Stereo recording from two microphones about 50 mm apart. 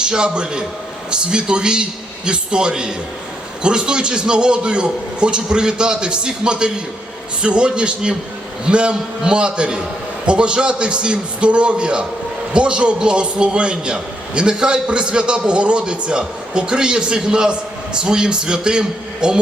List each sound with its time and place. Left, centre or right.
0.0 s a man's voice: centre